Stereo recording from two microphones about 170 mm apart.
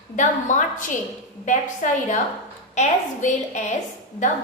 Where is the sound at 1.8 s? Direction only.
50° left (ahead or behind).